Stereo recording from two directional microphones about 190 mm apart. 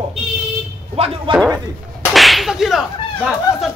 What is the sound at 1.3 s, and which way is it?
Speech, 25° right (ahead or behind).